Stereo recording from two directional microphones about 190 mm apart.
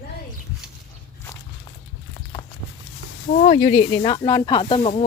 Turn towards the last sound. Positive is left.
turn(degrees=30)  # may be behind; listen again after turning